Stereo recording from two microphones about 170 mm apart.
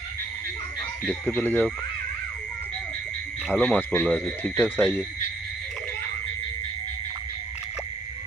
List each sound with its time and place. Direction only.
1.0 s speech: 10° left (ahead or behind)
3.5 s speech: 10° left (ahead or behind)